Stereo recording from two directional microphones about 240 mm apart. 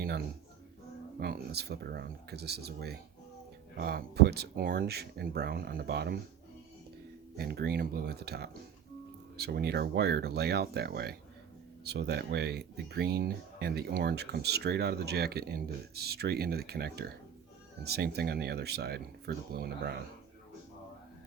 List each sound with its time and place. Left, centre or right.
1.2 s speech: right
7.3 s speech: right